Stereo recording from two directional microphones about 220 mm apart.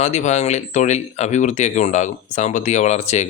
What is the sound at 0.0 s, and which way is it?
Speech, 30° left (ahead or behind).